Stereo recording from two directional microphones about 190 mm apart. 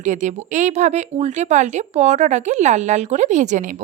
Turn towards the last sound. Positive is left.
turn(degrees=-40)  # may be behind; listen again after turning